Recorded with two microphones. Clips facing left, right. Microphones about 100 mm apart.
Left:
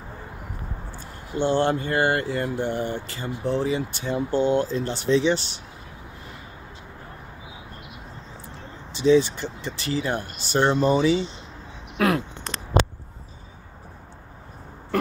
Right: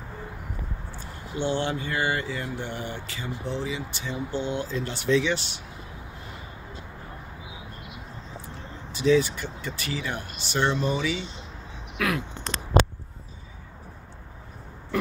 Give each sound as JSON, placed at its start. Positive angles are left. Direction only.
{"t": 1.4, "sound": "speech", "side_deg": 45}
{"t": 8.9, "sound": "speech", "side_deg": 25}